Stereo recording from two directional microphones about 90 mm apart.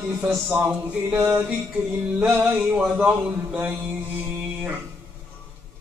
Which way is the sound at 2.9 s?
10° right (ahead or behind).